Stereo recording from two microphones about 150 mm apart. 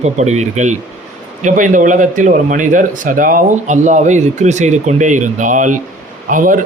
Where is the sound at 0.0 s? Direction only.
50° right (ahead or behind).